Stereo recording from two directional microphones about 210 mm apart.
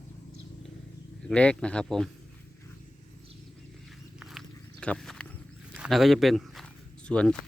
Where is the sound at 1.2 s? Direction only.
5° left (ahead or behind).